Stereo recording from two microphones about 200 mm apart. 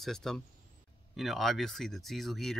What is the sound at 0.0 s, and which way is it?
Speech, centre (ahead or behind).